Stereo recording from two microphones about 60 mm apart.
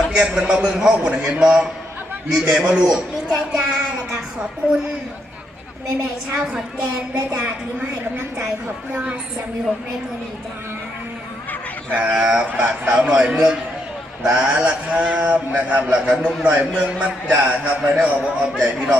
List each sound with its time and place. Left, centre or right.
0.1 s a man's voice: centre
7.1 s a man's voice: centre
8.9 s a man's voice: centre
11.9 s a man's voice: centre